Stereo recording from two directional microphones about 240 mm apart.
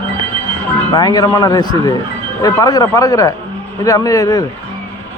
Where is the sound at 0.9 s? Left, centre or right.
Centre.